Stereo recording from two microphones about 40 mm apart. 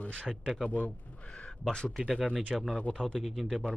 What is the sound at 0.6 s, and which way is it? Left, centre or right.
Speech, left.